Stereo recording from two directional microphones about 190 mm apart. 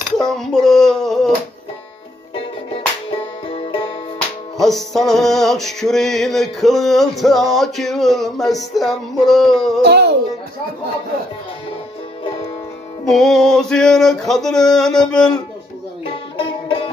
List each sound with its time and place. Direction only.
0.2 s a sound: centre (ahead or behind)
3.1 s music: 30° left (ahead or behind)
4.6 s music: centre (ahead or behind)
9.8 s music: 60° right (ahead or behind)
13.0 s music: centre (ahead or behind)
16.3 s music: 30° left (ahead or behind)